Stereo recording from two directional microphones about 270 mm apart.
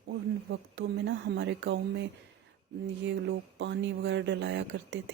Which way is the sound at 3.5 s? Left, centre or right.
Right.